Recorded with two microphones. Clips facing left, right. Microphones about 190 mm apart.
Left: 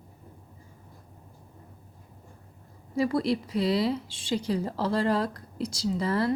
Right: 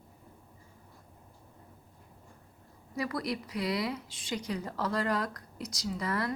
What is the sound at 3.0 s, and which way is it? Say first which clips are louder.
Speech: left 8 dB; 30° left (ahead or behind).